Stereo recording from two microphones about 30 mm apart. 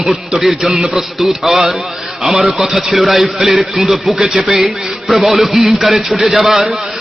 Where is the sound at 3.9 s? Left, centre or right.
Centre.